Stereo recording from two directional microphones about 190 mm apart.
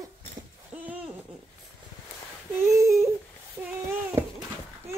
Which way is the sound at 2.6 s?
15° right (ahead or behind).